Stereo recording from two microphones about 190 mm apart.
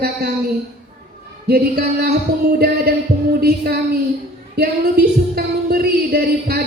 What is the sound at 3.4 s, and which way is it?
Music, 55° right (ahead or behind).